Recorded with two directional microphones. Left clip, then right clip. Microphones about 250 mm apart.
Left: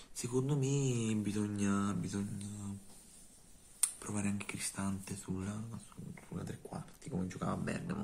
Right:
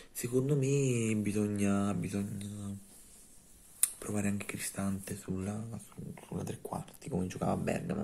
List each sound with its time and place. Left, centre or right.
0.2 s mantra: centre
3.8 s mantra: centre
6.1 s speech: centre